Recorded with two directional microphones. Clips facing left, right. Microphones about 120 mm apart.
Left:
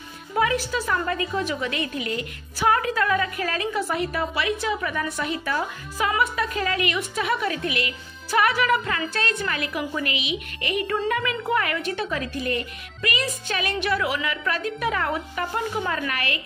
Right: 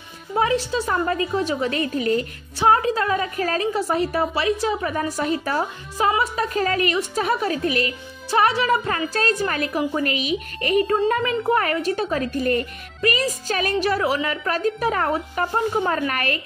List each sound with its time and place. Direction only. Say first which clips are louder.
0.4 s a woman's voice: right 2 dB; 30° right (ahead or behind)